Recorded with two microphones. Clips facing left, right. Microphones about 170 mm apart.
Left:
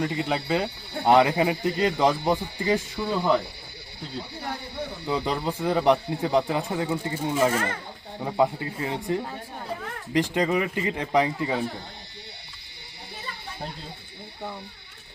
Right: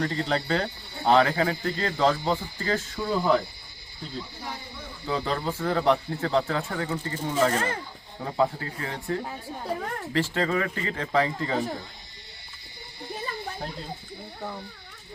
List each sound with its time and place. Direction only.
0.0 s speech: 10° left (ahead or behind)
4.2 s a sound: 60° left (ahead or behind)
5.0 s speech: 15° left (ahead or behind)